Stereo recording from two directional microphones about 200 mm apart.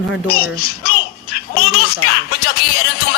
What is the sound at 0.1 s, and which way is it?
A child's voice, 50° left (ahead or behind).